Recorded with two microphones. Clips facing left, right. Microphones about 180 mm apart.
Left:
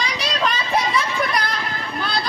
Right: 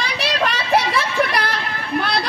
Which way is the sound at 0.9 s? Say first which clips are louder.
Right 2 dB; 70° right (ahead or behind).